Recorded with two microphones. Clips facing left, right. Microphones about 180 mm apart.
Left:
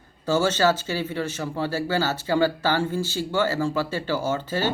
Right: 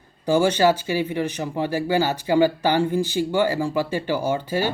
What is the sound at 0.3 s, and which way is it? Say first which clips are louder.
Speech: right 3 dB; 15° right (ahead or behind).